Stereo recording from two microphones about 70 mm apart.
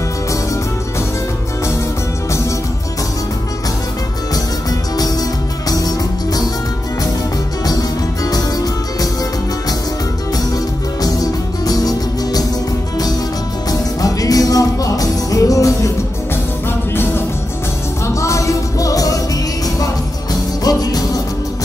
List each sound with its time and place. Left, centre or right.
5.7 s music: left
7.6 s music: left
11.0 s music: left
13.7 s music: left
16.9 s music: left
18.0 s music: left
20.6 s music: left